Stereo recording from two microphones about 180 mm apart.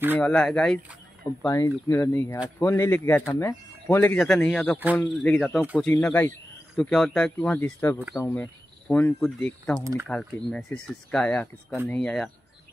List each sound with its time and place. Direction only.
0.2 s speech: 5° left (ahead or behind)
1.4 s speech: 15° left (ahead or behind)